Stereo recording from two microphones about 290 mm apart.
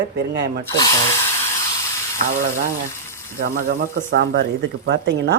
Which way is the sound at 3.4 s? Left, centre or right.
Right.